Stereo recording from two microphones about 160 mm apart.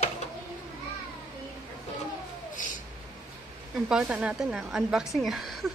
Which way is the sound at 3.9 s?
5° right (ahead or behind).